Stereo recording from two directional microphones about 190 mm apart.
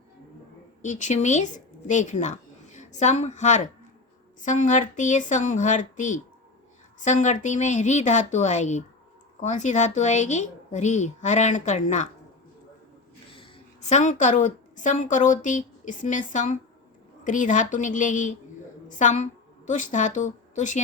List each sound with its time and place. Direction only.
0.8 s a woman's voice: 40° left (ahead or behind)
13.4 s a woman's voice: 35° left (ahead or behind)